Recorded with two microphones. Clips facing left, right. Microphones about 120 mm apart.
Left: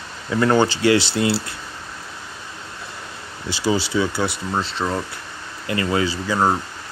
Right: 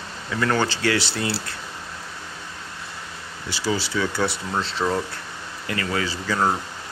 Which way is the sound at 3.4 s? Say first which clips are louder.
Left 4 dB; 15° left (ahead or behind).